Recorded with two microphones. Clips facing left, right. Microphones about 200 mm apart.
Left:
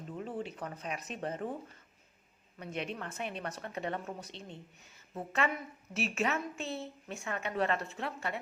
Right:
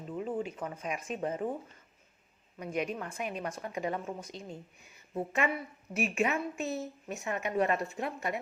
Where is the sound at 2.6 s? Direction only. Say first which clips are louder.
Right 5 dB; 10° right (ahead or behind).